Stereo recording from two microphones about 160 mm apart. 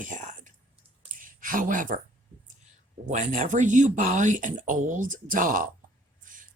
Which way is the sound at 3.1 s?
50° right (ahead or behind).